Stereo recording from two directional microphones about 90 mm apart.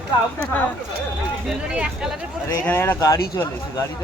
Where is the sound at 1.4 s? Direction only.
10° right (ahead or behind).